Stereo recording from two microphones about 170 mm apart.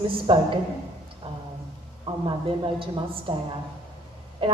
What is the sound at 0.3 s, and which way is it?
Speech, 30° right (ahead or behind).